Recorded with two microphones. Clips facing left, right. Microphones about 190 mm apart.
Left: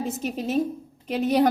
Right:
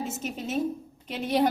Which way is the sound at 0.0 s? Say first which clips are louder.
Left 5 dB; 35° left (ahead or behind).